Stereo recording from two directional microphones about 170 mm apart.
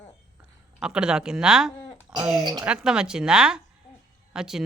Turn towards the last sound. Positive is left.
turn(degrees=-5)  # may be behind; listen again after turning